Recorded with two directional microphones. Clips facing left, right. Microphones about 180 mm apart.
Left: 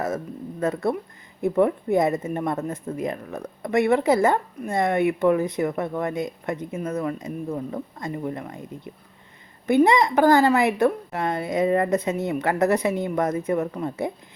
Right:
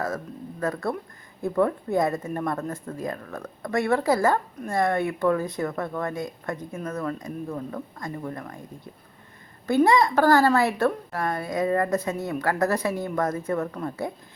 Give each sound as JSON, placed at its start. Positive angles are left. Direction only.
{"t": 0.6, "sound": "a woman's voice", "side_deg": 20}
{"t": 9.6, "sound": "a woman's voice", "side_deg": 20}